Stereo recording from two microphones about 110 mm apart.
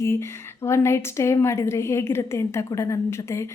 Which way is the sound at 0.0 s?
25° left (ahead or behind).